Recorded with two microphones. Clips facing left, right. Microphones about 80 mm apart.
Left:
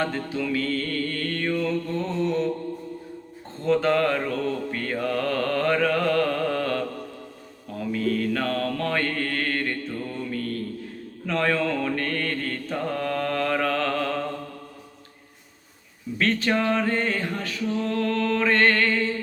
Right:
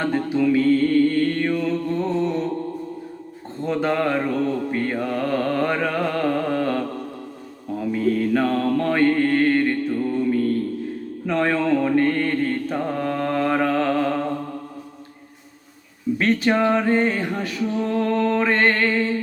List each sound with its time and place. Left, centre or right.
0.0 s mantra: centre
3.7 s mantra: centre
7.9 s mantra: centre
16.1 s a sound: centre